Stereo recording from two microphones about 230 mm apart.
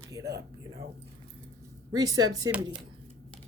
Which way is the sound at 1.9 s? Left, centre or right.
Centre.